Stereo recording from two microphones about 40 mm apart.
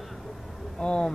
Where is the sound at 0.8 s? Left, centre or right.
Left.